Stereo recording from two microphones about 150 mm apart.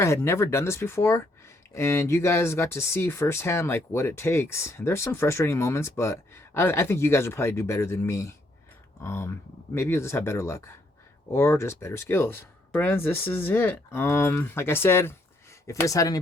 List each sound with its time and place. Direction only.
0.0 s speech: 15° left (ahead or behind)